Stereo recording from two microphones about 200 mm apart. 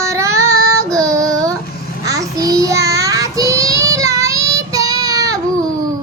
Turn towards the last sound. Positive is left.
turn(degrees=-15)  # may be behind; listen again after turning